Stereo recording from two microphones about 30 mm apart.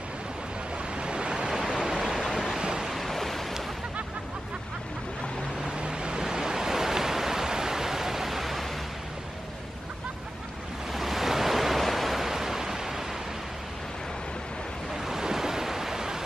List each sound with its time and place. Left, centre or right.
0.9 s waves: right
1.5 s waves: centre
2.9 s waves: centre
5.8 s vehicle: right
6.3 s waves: right; by 8.6 s centre
10.9 s waves: centre
12.3 s pink noise: centre
15.0 s waves: centre